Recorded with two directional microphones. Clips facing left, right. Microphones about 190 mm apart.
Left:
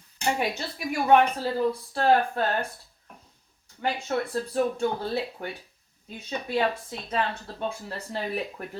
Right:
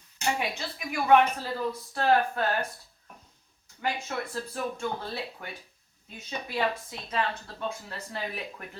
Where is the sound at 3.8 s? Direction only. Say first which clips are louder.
Left 4 dB; 35° left (ahead or behind).